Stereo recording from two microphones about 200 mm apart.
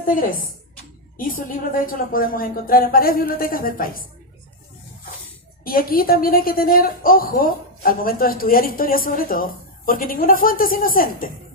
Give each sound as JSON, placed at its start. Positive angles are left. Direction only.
{"t": 1.1, "sound": "a woman's voice", "side_deg": 45}
{"t": 5.6, "sound": "a woman's voice", "side_deg": 45}